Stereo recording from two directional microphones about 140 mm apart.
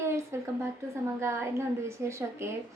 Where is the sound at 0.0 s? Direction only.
20° right (ahead or behind).